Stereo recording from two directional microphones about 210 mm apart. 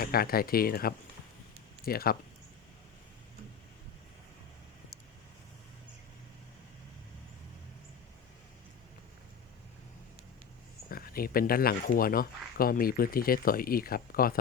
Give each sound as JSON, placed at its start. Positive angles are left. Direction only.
{"t": 0.0, "sound": "speech", "side_deg": 45}
{"t": 10.8, "sound": "speech", "side_deg": 45}